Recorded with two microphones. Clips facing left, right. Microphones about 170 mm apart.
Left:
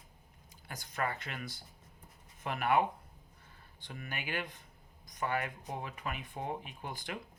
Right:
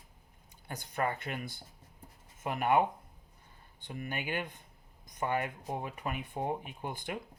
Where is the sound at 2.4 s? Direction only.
20° right (ahead or behind).